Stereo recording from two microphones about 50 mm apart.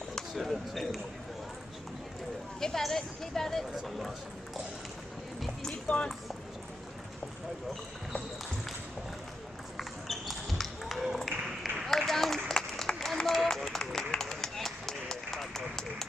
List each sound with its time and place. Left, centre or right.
0.1 s speech: centre
2.6 s speech: centre
5.9 s speech: left
9.8 s a sound: centre
11.2 s applause: centre